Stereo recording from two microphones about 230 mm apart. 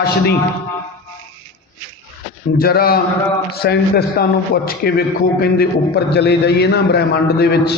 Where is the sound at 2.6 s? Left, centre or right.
Left.